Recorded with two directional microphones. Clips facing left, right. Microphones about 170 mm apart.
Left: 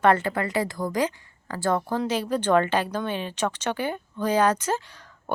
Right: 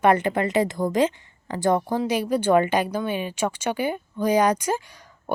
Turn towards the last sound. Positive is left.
turn(degrees=-10)  # may be behind; listen again after turning